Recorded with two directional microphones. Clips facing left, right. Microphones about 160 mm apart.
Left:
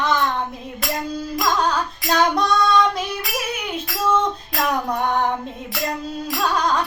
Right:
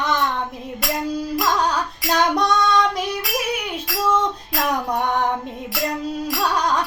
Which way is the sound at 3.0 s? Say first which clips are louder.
Right 2 dB; 10° right (ahead or behind).